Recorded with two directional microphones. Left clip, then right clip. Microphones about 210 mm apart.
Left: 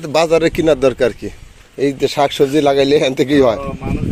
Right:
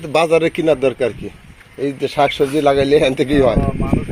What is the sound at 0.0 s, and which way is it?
Speech, 20° left (ahead or behind).